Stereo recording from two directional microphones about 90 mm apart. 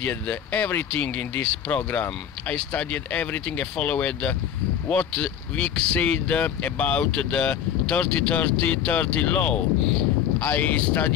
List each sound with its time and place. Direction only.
0.0 s speech: 15° left (ahead or behind)